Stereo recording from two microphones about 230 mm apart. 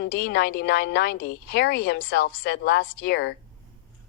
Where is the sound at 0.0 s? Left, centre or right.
Left.